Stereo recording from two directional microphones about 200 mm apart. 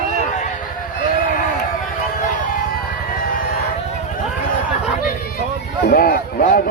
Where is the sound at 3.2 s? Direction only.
45° left (ahead or behind).